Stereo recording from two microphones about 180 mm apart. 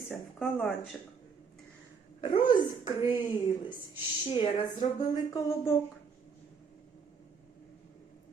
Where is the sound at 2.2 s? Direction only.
25° left (ahead or behind).